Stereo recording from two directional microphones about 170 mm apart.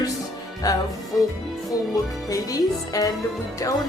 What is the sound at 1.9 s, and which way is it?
A woman's voice, 20° left (ahead or behind).